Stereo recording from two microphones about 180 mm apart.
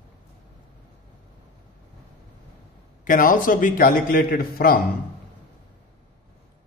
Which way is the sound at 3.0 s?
50° left (ahead or behind).